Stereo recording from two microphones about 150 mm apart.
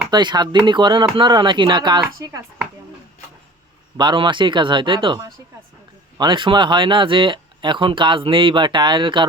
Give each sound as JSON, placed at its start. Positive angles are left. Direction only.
{"t": 0.1, "sound": "speech", "side_deg": -30}
{"t": 3.9, "sound": "speech", "side_deg": -30}